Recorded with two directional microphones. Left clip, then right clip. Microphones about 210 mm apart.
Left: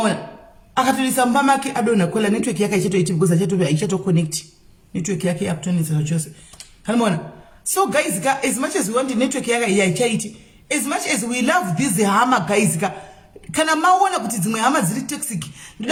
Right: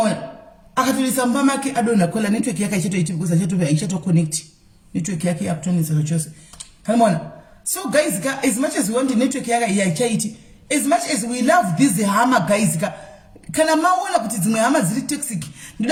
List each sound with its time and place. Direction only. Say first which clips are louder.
0.7 s speech: left 1 dB; centre (ahead or behind)
6.8 s speech: right 3 dB; centre (ahead or behind)